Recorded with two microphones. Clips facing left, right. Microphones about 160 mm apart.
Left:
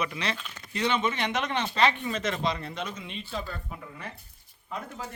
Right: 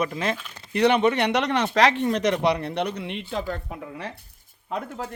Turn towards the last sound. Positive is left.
turn(degrees=-60)  # may be behind; listen again after turning